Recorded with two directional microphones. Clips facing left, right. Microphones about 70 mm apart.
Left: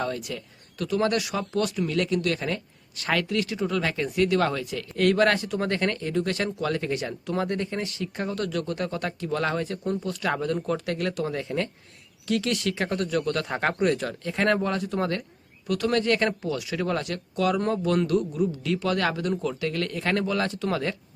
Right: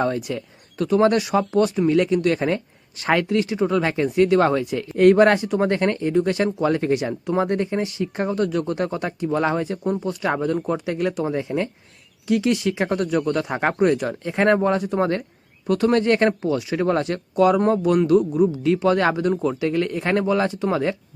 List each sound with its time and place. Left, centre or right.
0.0 s speech: right